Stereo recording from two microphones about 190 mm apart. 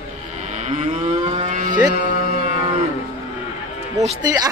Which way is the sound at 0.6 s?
35° right (ahead or behind).